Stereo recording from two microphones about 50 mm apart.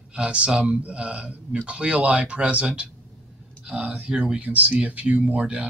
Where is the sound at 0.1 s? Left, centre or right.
Right.